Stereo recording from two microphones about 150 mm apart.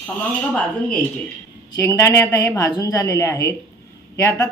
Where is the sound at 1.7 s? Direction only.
20° left (ahead or behind).